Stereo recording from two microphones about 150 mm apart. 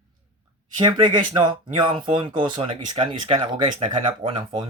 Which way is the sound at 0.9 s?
30° right (ahead or behind).